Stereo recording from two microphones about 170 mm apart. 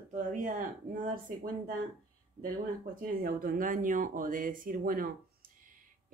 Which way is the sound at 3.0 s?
55° right (ahead or behind).